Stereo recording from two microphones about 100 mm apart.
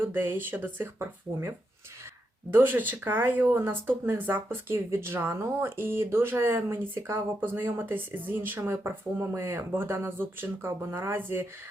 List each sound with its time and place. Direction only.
0.0 s speech: 20° right (ahead or behind)